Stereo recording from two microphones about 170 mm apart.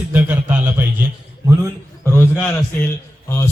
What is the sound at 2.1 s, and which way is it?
Speech, 10° left (ahead or behind).